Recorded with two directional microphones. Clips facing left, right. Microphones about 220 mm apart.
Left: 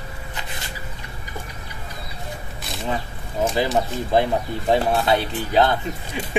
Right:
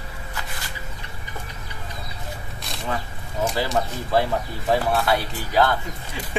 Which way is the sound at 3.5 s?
20° left (ahead or behind).